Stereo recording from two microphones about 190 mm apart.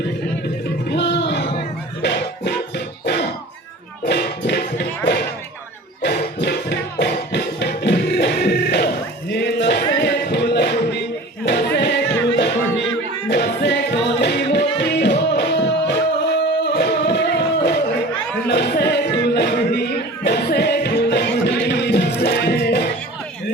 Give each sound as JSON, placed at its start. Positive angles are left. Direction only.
{"t": 0.9, "sound": "music", "side_deg": 60}